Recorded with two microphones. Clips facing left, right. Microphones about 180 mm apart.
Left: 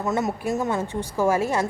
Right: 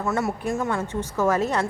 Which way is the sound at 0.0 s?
20° left (ahead or behind).